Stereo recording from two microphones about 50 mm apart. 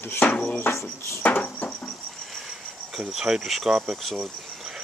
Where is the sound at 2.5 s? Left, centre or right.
Centre.